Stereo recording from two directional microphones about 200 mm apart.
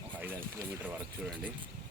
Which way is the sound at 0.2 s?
10° right (ahead or behind).